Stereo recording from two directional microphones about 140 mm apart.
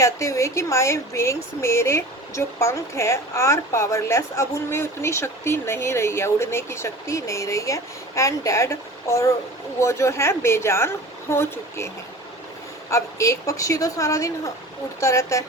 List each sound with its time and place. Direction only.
0.0 s speech: 20° left (ahead or behind)
12.9 s speech: 20° left (ahead or behind)